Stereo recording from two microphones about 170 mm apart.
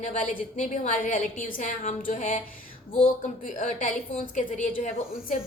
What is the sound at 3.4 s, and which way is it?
A woman's voice, 50° left (ahead or behind).